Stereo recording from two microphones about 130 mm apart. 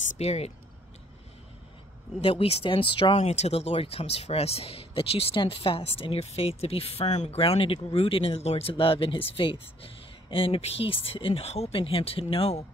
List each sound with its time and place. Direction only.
0.2 s speech: 55° left (ahead or behind)
2.2 s speech: 50° left (ahead or behind)
3.2 s speech: 55° left (ahead or behind)